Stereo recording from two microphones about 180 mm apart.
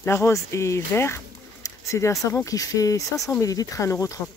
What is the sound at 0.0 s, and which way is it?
Speech, 15° left (ahead or behind).